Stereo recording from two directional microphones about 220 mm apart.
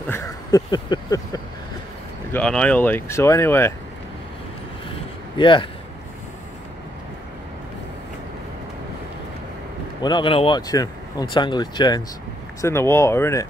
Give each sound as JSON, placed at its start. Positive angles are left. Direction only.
{"t": 0.0, "sound": "a sound", "side_deg": 10}
{"t": 2.3, "sound": "speech", "side_deg": 5}
{"t": 4.9, "sound": "vehicle", "side_deg": 20}
{"t": 10.0, "sound": "speech", "side_deg": 20}